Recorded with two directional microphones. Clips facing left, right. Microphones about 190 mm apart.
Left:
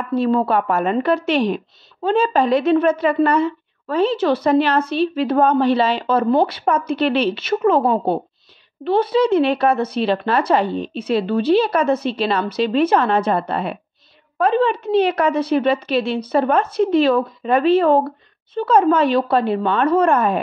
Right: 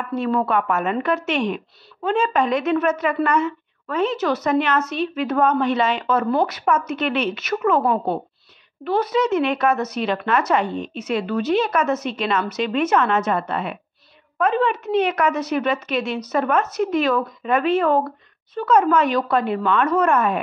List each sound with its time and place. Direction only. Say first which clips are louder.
0.0 s speech: left 4 dB; 30° left (ahead or behind)